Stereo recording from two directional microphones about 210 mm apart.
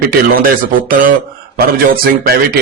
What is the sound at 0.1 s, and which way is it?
A man's voice, 45° right (ahead or behind).